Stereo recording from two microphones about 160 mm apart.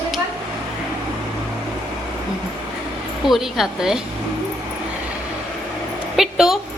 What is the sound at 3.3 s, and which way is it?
Speech, centre (ahead or behind).